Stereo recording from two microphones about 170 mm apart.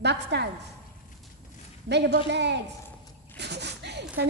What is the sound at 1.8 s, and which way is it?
Speech, 80° right.